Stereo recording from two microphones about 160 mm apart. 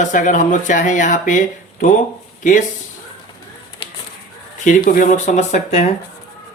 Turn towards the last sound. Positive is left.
turn(degrees=45)  # may be behind; listen again after turning